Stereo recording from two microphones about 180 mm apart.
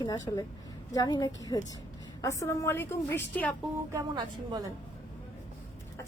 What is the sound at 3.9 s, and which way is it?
Speech, 20° right (ahead or behind).